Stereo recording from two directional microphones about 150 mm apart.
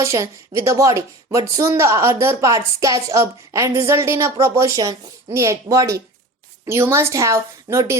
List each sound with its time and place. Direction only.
0.0 s a woman's voice: 20° right (ahead or behind)